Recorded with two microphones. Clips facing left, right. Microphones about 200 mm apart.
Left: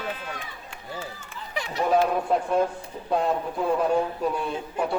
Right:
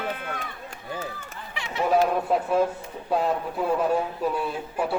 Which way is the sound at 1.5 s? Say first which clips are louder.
Left 1 dB; 40° left (ahead or behind).